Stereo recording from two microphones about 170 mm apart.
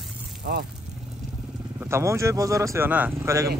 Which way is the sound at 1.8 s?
15° right (ahead or behind).